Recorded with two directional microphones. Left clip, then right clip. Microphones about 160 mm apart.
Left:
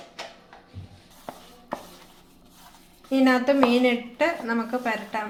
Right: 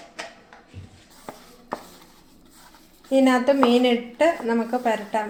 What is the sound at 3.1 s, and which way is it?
A woman's voice, 30° right (ahead or behind).